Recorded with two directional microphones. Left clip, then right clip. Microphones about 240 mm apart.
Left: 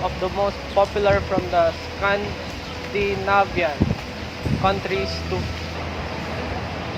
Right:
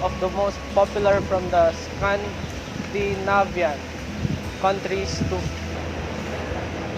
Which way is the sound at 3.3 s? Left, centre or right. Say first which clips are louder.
Left 1 dB; centre.